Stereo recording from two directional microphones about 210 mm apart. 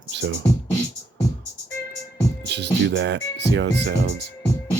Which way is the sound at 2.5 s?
55° right (ahead or behind).